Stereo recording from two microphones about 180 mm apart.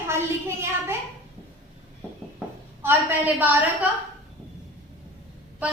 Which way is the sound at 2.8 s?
10° right (ahead or behind).